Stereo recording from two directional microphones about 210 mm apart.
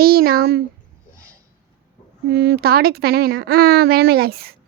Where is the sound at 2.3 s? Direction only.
50° right (ahead or behind).